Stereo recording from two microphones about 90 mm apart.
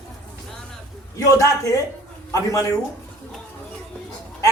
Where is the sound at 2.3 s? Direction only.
35° left (ahead or behind).